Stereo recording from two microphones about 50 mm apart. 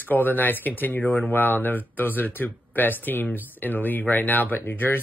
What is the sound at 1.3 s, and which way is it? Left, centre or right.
Speech, left.